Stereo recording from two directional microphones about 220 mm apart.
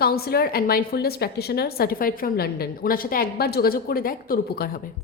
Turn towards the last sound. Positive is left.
turn(degrees=40)  # may be behind; listen again after turning